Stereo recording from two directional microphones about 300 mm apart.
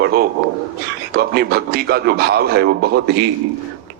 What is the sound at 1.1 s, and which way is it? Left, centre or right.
A man's voice, right.